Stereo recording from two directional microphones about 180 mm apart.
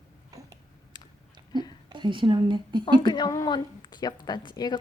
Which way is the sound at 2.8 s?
25° left (ahead or behind).